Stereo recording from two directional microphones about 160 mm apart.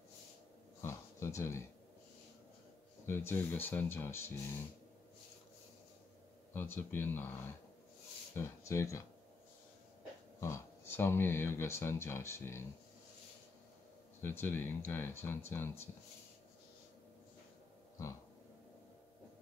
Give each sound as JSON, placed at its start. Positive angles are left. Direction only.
{"t": 0.7, "sound": "a sound", "side_deg": 15}
{"t": 3.1, "sound": "speech", "side_deg": 15}
{"t": 6.5, "sound": "speech", "side_deg": 15}
{"t": 10.4, "sound": "speech", "side_deg": 15}
{"t": 14.2, "sound": "speech", "side_deg": 15}